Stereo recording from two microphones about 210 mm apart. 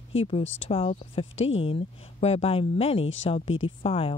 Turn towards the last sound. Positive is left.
turn(degrees=25)  # may be behind; listen again after turning